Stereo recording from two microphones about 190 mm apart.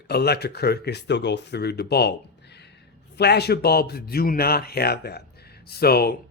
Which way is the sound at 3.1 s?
60° left (ahead or behind).